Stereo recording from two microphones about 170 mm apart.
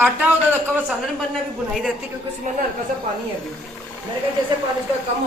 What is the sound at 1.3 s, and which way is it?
Speech, centre (ahead or behind).